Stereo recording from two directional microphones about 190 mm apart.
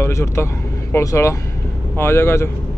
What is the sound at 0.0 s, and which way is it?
Speech, 15° left (ahead or behind).